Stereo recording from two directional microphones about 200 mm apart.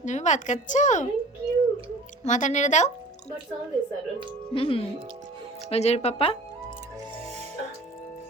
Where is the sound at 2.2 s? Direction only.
35° left (ahead or behind).